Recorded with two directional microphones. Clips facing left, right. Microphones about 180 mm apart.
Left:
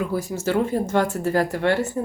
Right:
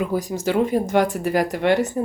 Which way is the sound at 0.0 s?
15° right (ahead or behind).